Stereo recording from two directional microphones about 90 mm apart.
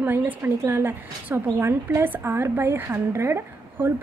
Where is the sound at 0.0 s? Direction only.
20° right (ahead or behind).